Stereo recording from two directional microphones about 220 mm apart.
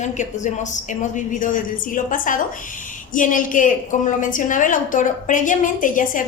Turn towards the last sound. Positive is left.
turn(degrees=35)  # may be behind; listen again after turning